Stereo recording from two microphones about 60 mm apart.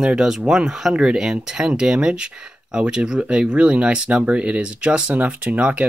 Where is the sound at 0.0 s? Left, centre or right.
Centre.